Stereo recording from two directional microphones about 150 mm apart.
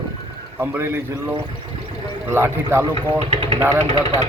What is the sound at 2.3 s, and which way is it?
Speech, 15° right (ahead or behind).